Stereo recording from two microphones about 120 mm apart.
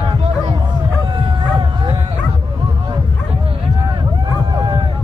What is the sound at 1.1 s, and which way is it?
Dog, 50° right (ahead or behind).